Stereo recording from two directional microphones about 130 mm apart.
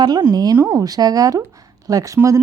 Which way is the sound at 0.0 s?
35° right (ahead or behind).